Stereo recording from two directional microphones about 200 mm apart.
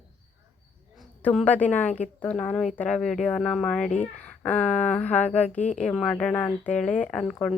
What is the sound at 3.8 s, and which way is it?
Speech, 35° left (ahead or behind).